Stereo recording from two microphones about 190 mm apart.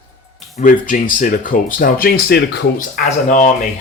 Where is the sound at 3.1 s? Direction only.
45° left (ahead or behind).